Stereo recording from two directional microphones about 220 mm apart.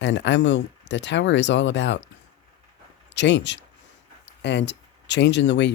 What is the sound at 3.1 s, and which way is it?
Speech, 55° left (ahead or behind).